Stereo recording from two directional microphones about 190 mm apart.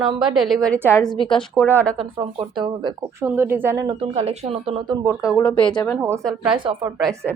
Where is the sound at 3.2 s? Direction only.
10° right (ahead or behind).